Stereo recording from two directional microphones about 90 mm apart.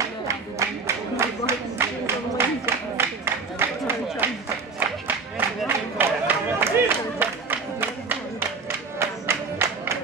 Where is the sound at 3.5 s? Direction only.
25° right (ahead or behind).